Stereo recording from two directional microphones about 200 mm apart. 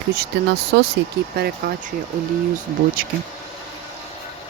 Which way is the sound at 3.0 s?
45° right (ahead or behind).